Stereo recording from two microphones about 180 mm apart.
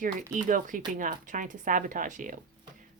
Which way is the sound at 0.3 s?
45° right (ahead or behind).